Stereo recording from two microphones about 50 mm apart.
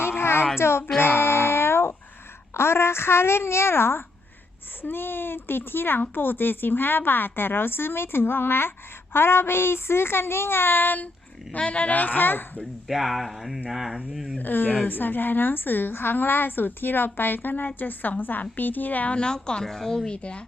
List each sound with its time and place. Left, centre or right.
0.0 s a sound: left
0.6 s speech: left
0.9 s music: left
2.5 s speech: left
11.5 s a woman's voice: left
12.9 s speech: centre
14.3 s a woman's voice: left
19.1 s speech: centre
20.1 s speech: left